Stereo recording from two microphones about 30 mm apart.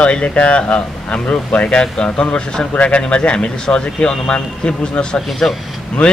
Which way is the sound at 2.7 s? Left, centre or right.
Left.